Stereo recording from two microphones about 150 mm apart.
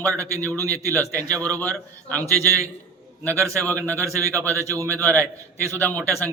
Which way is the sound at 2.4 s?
20° right (ahead or behind).